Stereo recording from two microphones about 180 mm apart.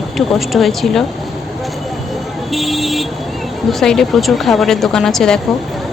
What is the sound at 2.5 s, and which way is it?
Speech, centre (ahead or behind).